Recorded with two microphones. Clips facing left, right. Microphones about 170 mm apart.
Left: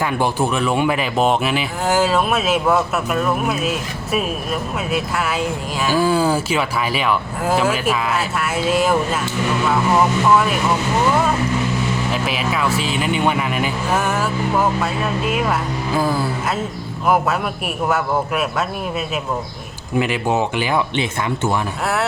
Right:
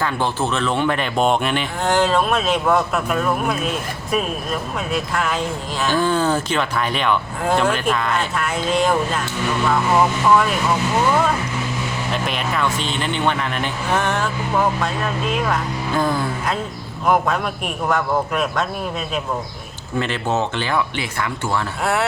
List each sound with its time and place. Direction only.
0.0 s speech: 10° left (ahead or behind)
12.1 s speech: 5° left (ahead or behind); by 21.6 s 20° left (ahead or behind)